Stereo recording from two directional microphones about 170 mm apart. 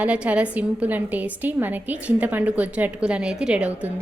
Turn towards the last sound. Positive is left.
turn(degrees=-10)  # may be behind; listen again after turning